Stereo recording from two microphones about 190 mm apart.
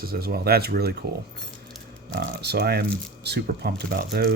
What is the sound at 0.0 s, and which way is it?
Speech, 55° right (ahead or behind).